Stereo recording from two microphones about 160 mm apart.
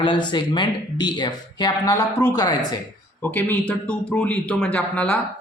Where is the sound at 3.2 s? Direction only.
10° left (ahead or behind).